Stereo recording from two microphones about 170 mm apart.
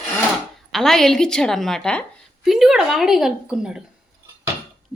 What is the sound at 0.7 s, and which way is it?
A woman's voice, centre (ahead or behind).